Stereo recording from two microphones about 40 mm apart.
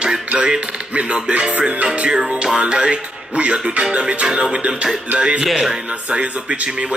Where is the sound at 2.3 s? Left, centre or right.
Right.